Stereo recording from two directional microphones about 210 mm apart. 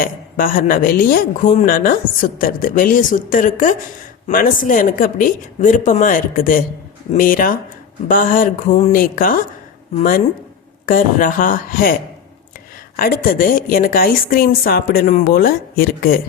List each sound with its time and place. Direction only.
0.0 s speech: 40° left (ahead or behind)
13.0 s a woman's voice: 45° left (ahead or behind)